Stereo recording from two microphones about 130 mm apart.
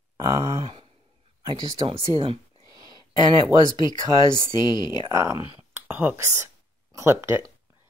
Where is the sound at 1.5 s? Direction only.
30° right (ahead or behind).